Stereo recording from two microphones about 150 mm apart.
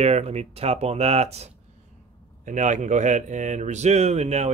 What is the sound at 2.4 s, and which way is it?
Speech, 55° right (ahead or behind).